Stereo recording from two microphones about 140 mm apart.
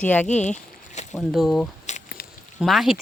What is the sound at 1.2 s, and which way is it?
Speech, centre (ahead or behind).